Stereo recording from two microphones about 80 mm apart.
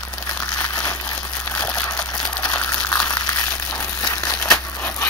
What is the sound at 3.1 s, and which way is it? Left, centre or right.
Crumpling, left.